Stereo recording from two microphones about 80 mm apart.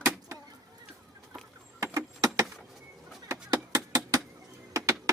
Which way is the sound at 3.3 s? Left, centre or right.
Right.